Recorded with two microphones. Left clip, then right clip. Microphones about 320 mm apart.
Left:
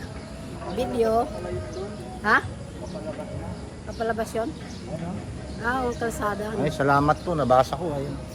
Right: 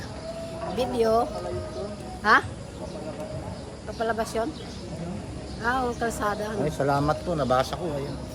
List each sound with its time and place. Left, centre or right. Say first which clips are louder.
0.8 s speech: even; centre
4.0 s speech: even; centre
5.6 s speech: even; centre
6.7 s a man's voice: left 5 dB; left